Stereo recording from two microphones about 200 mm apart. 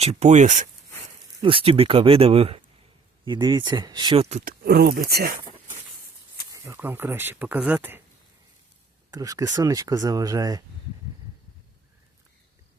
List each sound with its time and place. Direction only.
0.0 s speech: 35° right (ahead or behind)
1.4 s speech: 25° right (ahead or behind)
4.3 s speech: 35° right (ahead or behind)
4.6 s speech: 50° right (ahead or behind)
5.4 s a sound: 25° right (ahead or behind)
6.5 s speech: 10° right (ahead or behind)
9.1 s speech: 20° right (ahead or behind)